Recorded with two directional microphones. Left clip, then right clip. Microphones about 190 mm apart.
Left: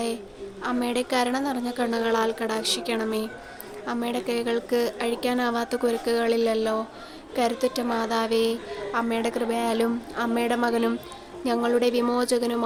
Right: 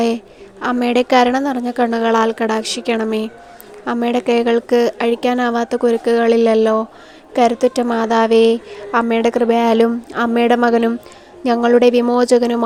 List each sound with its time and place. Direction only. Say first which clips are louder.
0.6 s a woman's voice: right 11 dB; 45° right (ahead or behind)